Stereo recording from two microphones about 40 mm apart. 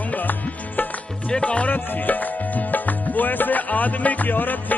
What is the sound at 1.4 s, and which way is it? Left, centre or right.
Music, left.